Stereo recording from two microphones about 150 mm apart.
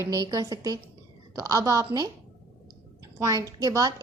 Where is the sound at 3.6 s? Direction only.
20° right (ahead or behind).